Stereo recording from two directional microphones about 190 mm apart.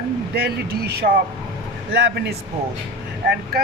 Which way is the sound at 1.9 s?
60° right (ahead or behind).